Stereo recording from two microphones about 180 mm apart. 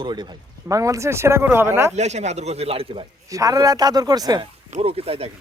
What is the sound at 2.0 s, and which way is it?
Speech, 40° right (ahead or behind).